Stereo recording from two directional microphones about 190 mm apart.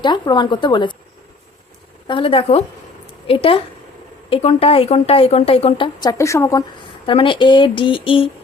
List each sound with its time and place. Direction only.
0.0 s a woman's voice: 25° left (ahead or behind)
2.0 s a woman's voice: 25° left (ahead or behind)